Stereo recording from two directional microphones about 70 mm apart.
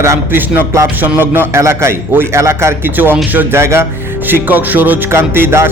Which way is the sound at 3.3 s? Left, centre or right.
Right.